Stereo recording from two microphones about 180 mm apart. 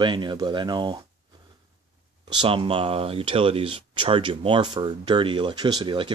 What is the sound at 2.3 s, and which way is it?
Speech, 25° right (ahead or behind).